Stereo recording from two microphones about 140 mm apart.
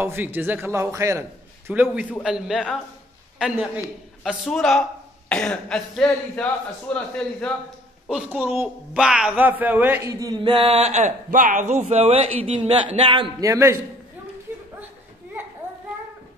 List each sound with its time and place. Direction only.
0.0 s a man's voice: 15° right (ahead or behind); by 7.5 s 10° left (ahead or behind)
8.1 s a man's voice: 5° right (ahead or behind); by 13.3 s 40° right (ahead or behind)
13.4 s a man's voice: 20° right (ahead or behind)